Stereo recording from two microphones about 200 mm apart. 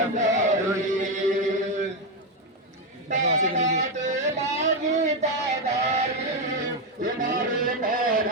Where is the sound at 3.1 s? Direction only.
35° right (ahead or behind).